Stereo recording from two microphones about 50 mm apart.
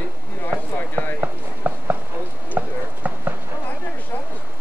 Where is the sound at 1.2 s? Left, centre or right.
Right.